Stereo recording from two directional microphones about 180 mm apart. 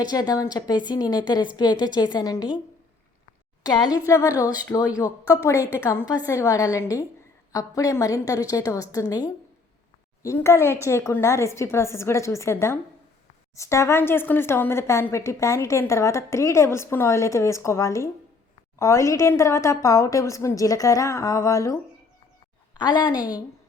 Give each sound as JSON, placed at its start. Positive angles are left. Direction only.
{"t": 0.0, "sound": "a woman's voice", "side_deg": 20}
{"t": 3.6, "sound": "a woman's voice", "side_deg": 20}
{"t": 5.5, "sound": "a woman's voice", "side_deg": -10}
{"t": 6.2, "sound": "a woman's voice", "side_deg": 15}
{"t": 22.8, "sound": "a woman's voice", "side_deg": 25}